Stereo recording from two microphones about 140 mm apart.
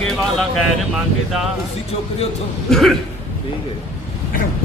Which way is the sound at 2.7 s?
Centre (ahead or behind).